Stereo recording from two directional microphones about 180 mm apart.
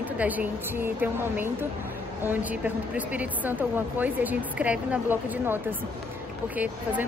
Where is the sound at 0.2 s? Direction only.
10° right (ahead or behind).